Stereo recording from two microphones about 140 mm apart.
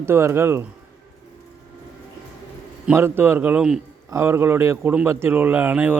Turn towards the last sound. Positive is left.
turn(degrees=-15)  # may be behind; listen again after turning